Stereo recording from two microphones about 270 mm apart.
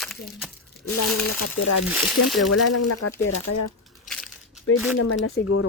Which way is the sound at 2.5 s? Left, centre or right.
Left.